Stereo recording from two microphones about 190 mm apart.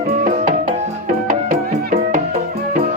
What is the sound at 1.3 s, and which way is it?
Music, 45° right (ahead or behind).